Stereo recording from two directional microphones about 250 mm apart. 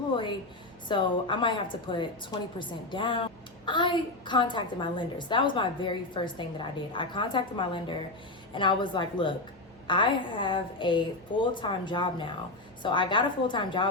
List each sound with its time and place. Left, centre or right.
0.9 s a woman's voice: centre